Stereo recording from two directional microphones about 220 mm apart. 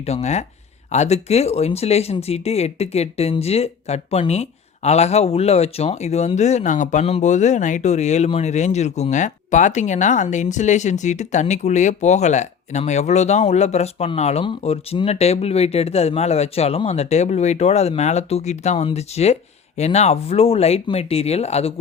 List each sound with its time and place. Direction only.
0.0 s speech: 30° left (ahead or behind)